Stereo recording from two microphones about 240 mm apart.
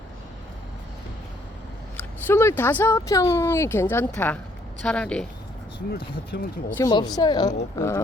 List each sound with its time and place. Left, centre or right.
2.2 s speech: centre
6.3 s speech: left
6.7 s speech: centre